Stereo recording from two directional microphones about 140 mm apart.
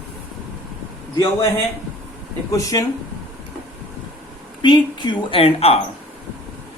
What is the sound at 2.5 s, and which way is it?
Speech, 25° left (ahead or behind).